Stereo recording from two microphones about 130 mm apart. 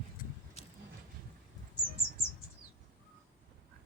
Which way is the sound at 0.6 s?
55° left (ahead or behind).